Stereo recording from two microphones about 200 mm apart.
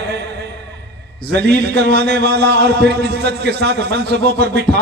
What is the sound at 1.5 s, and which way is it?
Speech, 55° right (ahead or behind).